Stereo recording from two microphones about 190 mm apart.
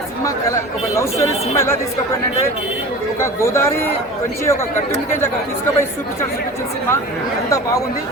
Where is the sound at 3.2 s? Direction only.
15° left (ahead or behind).